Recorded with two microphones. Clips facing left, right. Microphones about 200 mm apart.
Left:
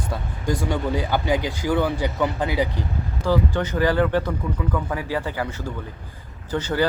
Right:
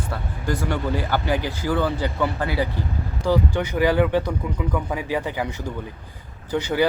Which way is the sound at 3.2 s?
15° right (ahead or behind).